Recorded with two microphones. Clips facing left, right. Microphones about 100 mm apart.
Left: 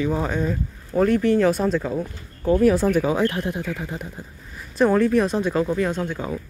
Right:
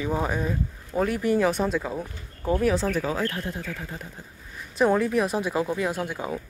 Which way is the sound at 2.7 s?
10° left (ahead or behind).